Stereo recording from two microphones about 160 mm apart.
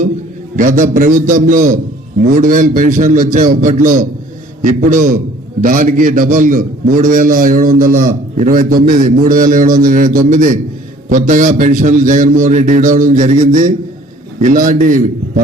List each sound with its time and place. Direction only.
0.5 s a man's voice: 55° right (ahead or behind)